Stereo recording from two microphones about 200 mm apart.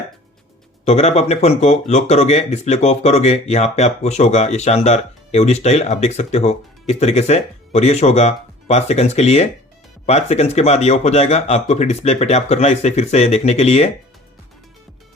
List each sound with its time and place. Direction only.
0.9 s speech: 30° left (ahead or behind)